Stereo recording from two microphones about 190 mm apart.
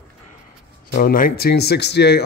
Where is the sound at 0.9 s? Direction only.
45° left (ahead or behind).